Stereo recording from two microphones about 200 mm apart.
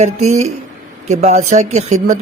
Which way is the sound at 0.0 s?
35° right (ahead or behind).